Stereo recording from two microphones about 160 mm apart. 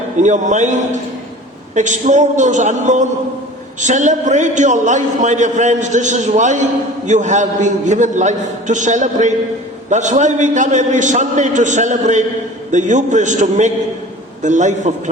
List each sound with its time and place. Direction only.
0.2 s a man's voice: 50° right (ahead or behind)